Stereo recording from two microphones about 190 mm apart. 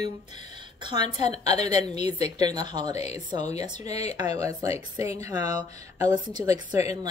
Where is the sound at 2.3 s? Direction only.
20° right (ahead or behind).